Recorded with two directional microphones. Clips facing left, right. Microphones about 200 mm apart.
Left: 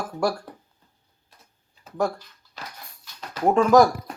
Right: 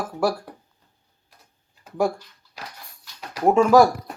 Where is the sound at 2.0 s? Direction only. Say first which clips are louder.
Right 4 dB; 15° right (ahead or behind).